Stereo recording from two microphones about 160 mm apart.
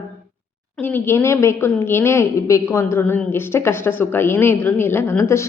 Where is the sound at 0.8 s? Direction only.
10° left (ahead or behind).